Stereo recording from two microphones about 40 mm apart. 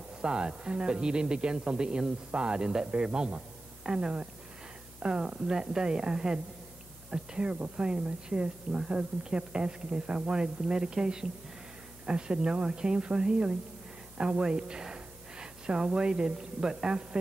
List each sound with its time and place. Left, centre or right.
0.2 s a woman's voice: right